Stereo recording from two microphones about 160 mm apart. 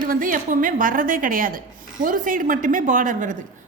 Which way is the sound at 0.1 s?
60° right (ahead or behind).